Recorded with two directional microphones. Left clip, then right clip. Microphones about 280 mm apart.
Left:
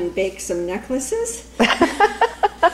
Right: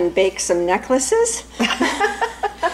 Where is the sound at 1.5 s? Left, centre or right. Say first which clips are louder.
Left 5 dB; centre.